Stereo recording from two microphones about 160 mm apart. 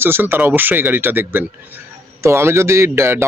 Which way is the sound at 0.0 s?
15° right (ahead or behind).